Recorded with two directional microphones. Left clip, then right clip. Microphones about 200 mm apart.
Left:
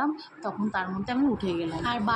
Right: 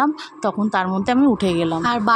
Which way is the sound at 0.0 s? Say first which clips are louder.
Right 10 dB; 60° right (ahead or behind).